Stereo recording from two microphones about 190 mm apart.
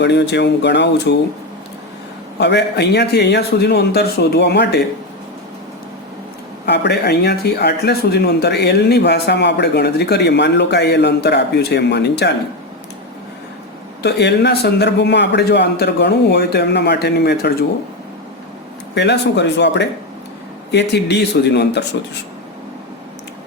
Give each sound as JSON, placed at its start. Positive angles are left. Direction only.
{"t": 0.0, "sound": "speech", "side_deg": 65}
{"t": 2.4, "sound": "speech", "side_deg": 65}
{"t": 6.7, "sound": "speech", "side_deg": 60}
{"t": 14.0, "sound": "speech", "side_deg": 65}
{"t": 18.9, "sound": "speech", "side_deg": 65}